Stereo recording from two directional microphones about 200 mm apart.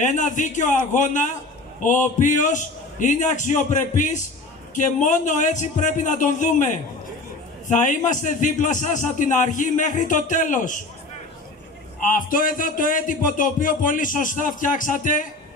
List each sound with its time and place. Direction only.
0.0 s a man's voice: 40° left (ahead or behind)
12.0 s a man's voice: 45° left (ahead or behind)